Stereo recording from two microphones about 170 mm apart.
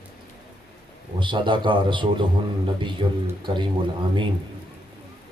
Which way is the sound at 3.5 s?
30° right (ahead or behind).